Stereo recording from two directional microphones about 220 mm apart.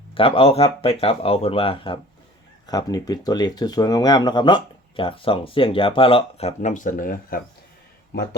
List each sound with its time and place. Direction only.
0.1 s speech: 25° left (ahead or behind); by 8.4 s 45° left (ahead or behind)